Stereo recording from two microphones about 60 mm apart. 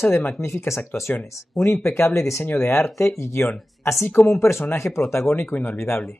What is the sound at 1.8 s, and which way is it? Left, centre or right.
Speech, left.